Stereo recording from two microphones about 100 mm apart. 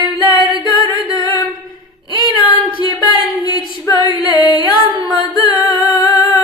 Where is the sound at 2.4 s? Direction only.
55° left (ahead or behind).